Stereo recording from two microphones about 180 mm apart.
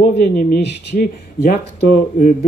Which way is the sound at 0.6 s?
55° left (ahead or behind).